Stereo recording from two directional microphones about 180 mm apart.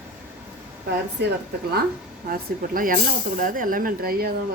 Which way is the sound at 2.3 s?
50° right (ahead or behind).